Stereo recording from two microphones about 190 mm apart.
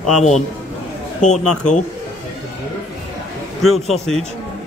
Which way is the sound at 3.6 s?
Centre (ahead or behind).